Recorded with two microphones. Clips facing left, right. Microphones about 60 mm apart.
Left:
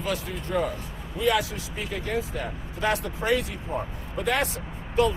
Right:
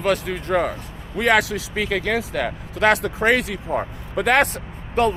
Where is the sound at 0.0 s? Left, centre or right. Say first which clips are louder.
Right 8 dB; right.